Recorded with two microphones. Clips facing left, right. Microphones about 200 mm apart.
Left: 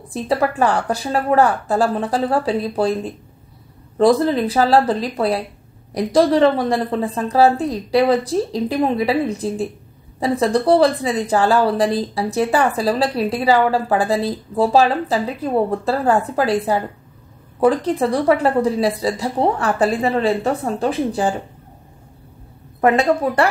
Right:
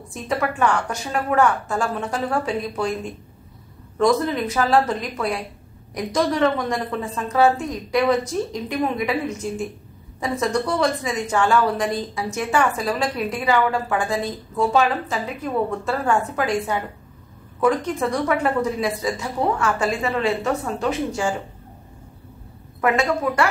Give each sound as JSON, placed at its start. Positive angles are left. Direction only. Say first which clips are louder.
{"t": 0.1, "sound": "a woman's voice", "louder": "left 5 dB", "side_deg": 35}
{"t": 22.8, "sound": "a woman's voice", "louder": "left 5 dB", "side_deg": 35}